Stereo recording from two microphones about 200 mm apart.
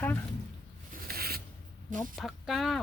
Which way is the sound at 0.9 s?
50° right (ahead or behind).